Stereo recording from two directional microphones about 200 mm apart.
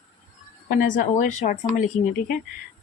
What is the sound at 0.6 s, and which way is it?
A woman's voice, 45° left (ahead or behind).